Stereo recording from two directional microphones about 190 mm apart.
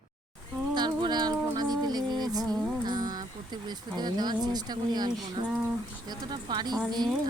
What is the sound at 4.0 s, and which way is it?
Speech, 20° right (ahead or behind).